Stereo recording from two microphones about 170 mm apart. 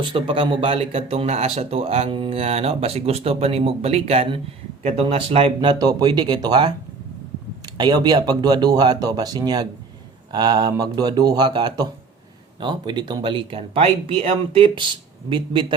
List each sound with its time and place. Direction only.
0.0 s speech: 30° right (ahead or behind)
7.8 s speech: 25° right (ahead or behind)